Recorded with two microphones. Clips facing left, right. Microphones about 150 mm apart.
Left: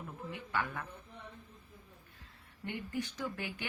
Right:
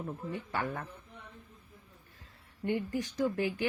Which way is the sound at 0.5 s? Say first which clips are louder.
Right 1 dB; 40° right (ahead or behind).